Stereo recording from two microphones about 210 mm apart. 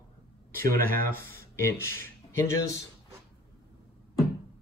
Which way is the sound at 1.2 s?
10° left (ahead or behind).